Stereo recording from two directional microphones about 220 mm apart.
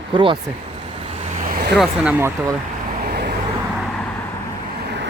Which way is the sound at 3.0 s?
45° right (ahead or behind).